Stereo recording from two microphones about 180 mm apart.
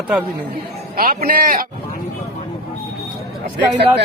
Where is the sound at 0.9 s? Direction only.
50° right (ahead or behind).